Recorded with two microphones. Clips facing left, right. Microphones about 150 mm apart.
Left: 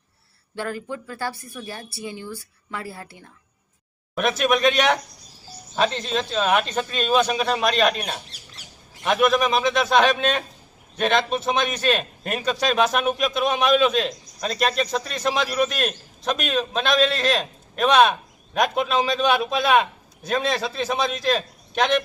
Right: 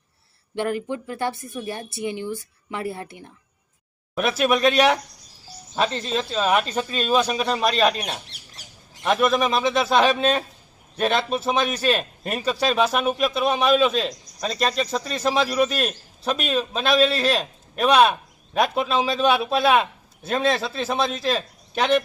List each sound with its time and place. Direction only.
0.5 s speech: 20° right (ahead or behind)
4.1 s a man's voice: 5° right (ahead or behind)
8.6 s bird: 40° right (ahead or behind)
9.0 s a man's voice: centre (ahead or behind)